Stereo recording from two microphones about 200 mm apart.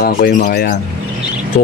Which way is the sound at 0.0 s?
45° left (ahead or behind).